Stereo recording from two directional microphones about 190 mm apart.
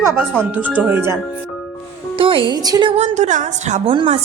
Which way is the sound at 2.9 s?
35° right (ahead or behind).